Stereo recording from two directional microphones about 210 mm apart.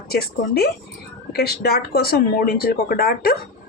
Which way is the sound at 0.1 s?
50° left (ahead or behind).